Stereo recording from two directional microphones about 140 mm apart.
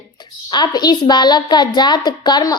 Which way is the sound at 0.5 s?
30° left (ahead or behind).